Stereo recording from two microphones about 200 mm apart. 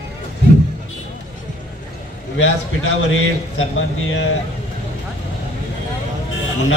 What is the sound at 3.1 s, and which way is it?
Speech, 80° left.